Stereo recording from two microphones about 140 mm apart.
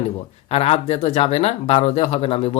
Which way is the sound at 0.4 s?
45° left (ahead or behind).